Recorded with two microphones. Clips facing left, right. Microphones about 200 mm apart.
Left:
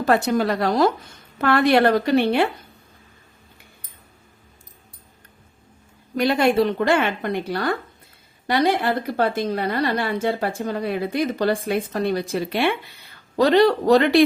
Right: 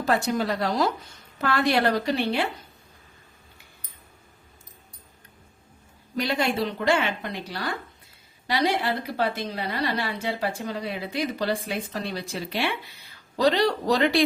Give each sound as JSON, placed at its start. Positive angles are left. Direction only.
{"t": 0.0, "sound": "a woman's voice", "side_deg": 60}
{"t": 6.1, "sound": "a woman's voice", "side_deg": 55}